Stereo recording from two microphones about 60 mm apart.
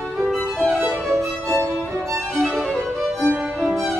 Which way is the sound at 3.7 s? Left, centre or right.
Centre.